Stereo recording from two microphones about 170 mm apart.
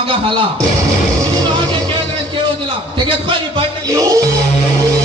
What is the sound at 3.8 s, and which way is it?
Music, 20° right (ahead or behind).